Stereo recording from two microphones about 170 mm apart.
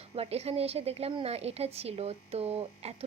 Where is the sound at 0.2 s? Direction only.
35° right (ahead or behind).